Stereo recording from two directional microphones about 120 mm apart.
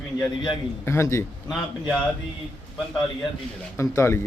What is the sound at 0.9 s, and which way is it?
Speech, 25° left (ahead or behind).